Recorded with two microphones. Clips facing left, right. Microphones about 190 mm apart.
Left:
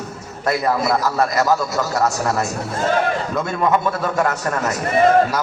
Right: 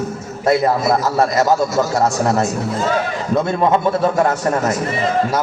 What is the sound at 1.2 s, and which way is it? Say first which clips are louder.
Speech: right 3 dB; 25° right (ahead or behind).